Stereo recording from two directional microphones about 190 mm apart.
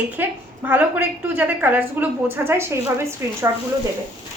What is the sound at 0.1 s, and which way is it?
A woman's voice, 10° right (ahead or behind).